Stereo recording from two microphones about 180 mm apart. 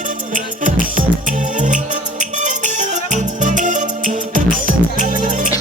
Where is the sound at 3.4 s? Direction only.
45° right (ahead or behind).